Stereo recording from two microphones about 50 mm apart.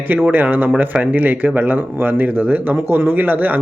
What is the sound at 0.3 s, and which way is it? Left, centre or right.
Speech, right.